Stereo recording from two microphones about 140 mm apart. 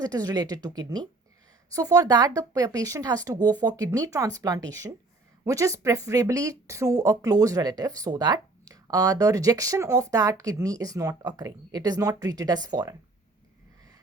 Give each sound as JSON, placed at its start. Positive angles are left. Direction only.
{"t": 0.0, "sound": "speech", "side_deg": -25}